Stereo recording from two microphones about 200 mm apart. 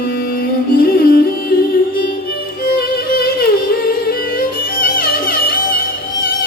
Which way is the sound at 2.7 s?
50° left (ahead or behind).